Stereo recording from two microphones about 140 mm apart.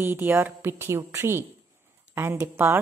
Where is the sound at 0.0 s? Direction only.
15° right (ahead or behind).